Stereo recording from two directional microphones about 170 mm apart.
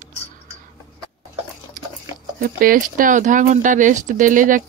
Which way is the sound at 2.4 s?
60° right (ahead or behind).